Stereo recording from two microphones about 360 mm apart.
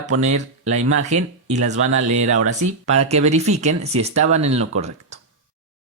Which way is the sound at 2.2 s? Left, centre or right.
Right.